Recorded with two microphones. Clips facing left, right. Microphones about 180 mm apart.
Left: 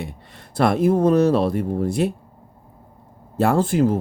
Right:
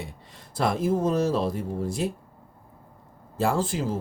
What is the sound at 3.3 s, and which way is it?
Speech, 60° left (ahead or behind).